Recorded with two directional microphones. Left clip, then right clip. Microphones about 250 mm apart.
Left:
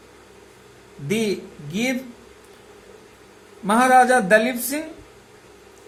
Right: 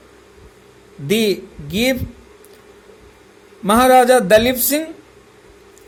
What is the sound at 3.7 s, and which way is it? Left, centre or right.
A woman's voice, right.